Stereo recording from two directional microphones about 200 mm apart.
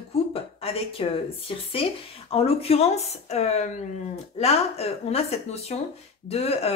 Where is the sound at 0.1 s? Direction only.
30° left (ahead or behind).